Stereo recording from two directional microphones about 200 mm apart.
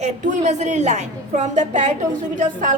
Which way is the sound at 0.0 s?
35° right (ahead or behind).